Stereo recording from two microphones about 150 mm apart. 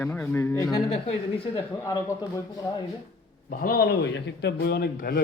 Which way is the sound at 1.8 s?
20° left (ahead or behind).